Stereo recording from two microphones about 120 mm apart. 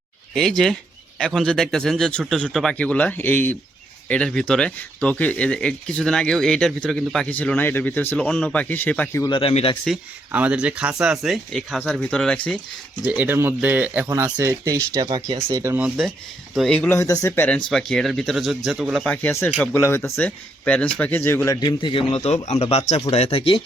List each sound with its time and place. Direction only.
0.3 s speech: 5° left (ahead or behind)
9.3 s speech: 50° left (ahead or behind)
10.3 s speech: 10° right (ahead or behind); by 12.5 s 10° left (ahead or behind)
13.1 s speech: 15° right (ahead or behind)
14.3 s speech: 25° right (ahead or behind)
15.5 s speech: 20° right (ahead or behind)
16.7 s speech: 10° left (ahead or behind)
17.0 s speech: 25° left (ahead or behind)
17.7 s speech: 5° left (ahead or behind)
19.0 s speech: 15° left (ahead or behind)
21.6 s a man's voice: 40° left (ahead or behind)
22.1 s speech: 60° left (ahead or behind)